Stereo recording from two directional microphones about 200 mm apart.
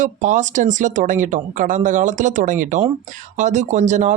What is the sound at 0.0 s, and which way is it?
Speech, 40° right (ahead or behind).